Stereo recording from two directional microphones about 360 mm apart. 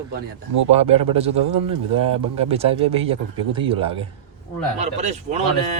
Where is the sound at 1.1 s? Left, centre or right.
Centre.